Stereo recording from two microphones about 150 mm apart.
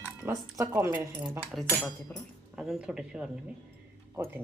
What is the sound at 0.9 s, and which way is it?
Speech, 10° right (ahead or behind).